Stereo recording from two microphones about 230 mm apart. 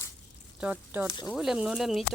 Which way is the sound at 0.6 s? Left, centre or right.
Centre.